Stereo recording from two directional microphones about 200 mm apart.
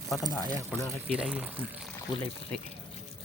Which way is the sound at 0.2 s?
20° left (ahead or behind).